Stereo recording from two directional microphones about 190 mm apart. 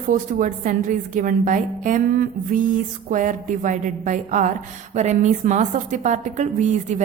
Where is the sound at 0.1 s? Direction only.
45° right (ahead or behind).